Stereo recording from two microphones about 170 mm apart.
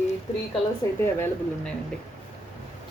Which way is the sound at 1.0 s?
15° left (ahead or behind).